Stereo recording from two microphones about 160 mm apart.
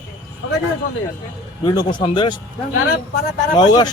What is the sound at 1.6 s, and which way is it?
Speech, 25° left (ahead or behind).